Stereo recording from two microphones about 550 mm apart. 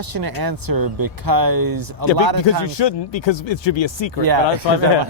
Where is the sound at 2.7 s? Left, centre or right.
Left.